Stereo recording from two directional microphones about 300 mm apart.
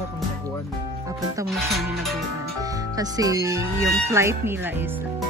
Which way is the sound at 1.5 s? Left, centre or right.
Centre.